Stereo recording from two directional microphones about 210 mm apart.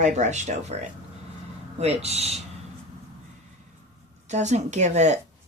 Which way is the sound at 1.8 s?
30° right (ahead or behind).